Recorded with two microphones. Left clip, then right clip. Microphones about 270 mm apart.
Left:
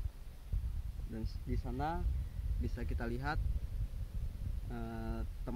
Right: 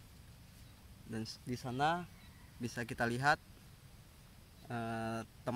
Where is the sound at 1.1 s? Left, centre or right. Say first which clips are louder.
Right 2 dB; right.